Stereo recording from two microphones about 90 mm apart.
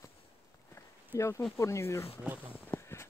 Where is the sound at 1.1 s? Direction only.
35° left (ahead or behind).